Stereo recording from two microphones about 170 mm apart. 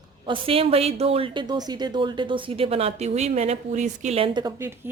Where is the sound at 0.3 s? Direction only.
35° right (ahead or behind).